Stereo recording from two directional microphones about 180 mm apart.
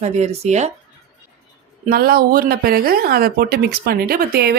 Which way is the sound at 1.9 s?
55° right (ahead or behind).